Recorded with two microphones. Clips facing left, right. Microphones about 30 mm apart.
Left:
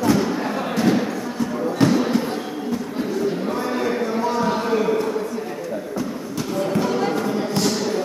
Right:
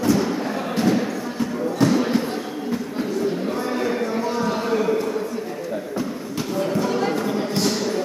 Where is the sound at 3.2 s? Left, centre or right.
Centre.